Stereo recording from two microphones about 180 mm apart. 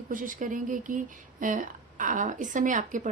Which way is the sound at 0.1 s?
50° right (ahead or behind).